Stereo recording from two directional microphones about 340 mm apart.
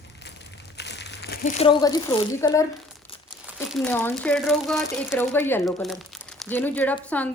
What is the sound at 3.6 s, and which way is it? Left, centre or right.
Speech, centre.